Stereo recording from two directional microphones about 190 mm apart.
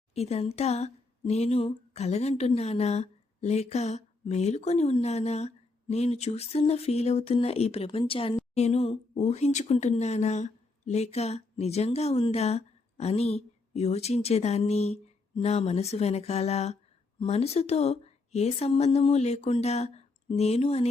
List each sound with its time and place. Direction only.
0.1 s speech: 35° left (ahead or behind)